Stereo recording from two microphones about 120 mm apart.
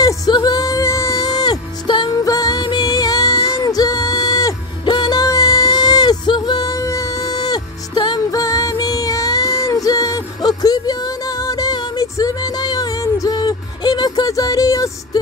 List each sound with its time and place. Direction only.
0.0 s music: 30° left (ahead or behind)